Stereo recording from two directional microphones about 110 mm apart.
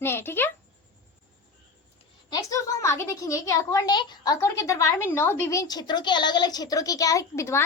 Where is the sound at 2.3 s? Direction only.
30° left (ahead or behind).